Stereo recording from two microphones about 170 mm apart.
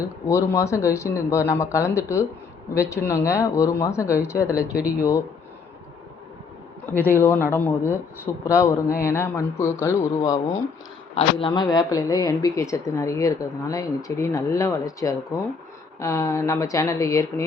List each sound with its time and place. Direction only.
0.0 s speech: 20° left (ahead or behind)
6.9 s speech: 10° left (ahead or behind)
11.1 s speech: 35° left (ahead or behind); by 17.4 s 20° left (ahead or behind)